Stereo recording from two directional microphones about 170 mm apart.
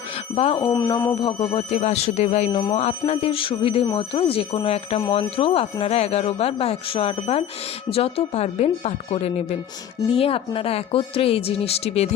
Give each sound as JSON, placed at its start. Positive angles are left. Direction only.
{"t": 0.3, "sound": "speech", "side_deg": 30}
{"t": 0.7, "sound": "speech", "side_deg": 15}
{"t": 1.4, "sound": "speech", "side_deg": 35}